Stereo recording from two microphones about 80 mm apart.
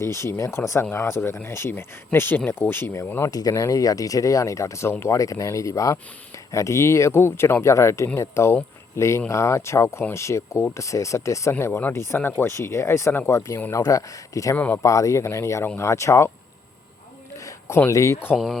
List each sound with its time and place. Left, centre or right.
0.0 s speech: left
3.2 s speech: left
14.5 s speech: left
14.8 s speech: left
17.3 s a sound: left
17.9 s speech: left